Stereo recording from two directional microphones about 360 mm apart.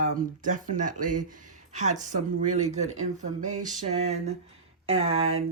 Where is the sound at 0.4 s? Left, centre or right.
Right.